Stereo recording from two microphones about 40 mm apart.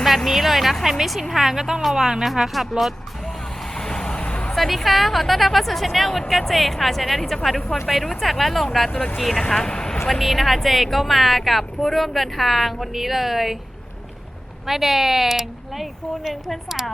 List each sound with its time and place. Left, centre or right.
0.3 s speech: centre
2.2 s speech: centre
3.8 s vehicle: centre
4.2 s vehicle: left
4.5 s speech: centre
9.6 s vehicle: centre
10.1 s speech: centre
14.7 s a woman's voice: centre